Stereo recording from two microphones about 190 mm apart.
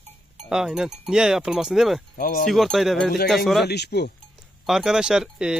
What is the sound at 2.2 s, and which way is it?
Wind chime, 45° left (ahead or behind).